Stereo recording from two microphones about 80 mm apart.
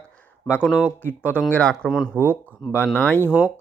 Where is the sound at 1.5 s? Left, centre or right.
Centre.